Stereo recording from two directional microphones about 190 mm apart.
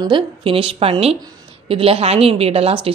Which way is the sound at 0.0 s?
25° right (ahead or behind).